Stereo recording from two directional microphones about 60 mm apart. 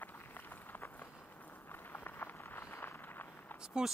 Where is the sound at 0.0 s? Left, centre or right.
Left.